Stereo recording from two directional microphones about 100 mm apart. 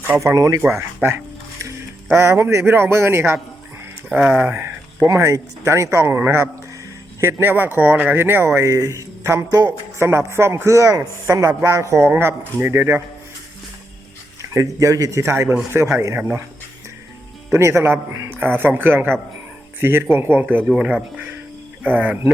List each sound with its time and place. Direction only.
0.2 s speech: 30° right (ahead or behind)
2.0 s speech: 25° right (ahead or behind)
4.1 s speech: 15° right (ahead or behind)
5.0 s speech: 30° right (ahead or behind)
14.5 s speech: 35° right (ahead or behind)
17.5 s speech: 25° right (ahead or behind)